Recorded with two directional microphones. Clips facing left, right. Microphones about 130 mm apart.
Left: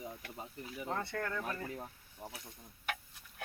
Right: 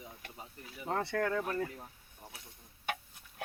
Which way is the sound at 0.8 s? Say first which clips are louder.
Right 6 dB; 75° right (ahead or behind).